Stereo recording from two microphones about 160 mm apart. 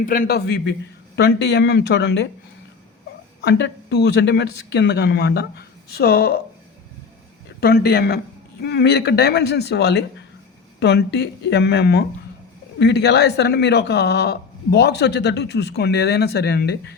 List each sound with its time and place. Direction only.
0.0 s speech: 60° left (ahead or behind); by 2.2 s 90° left
3.4 s speech: 90° left
7.6 s speech: 75° left (ahead or behind)
8.6 s speech: 90° left